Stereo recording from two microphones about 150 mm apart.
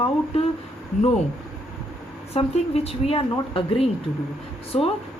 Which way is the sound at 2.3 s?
45° left (ahead or behind).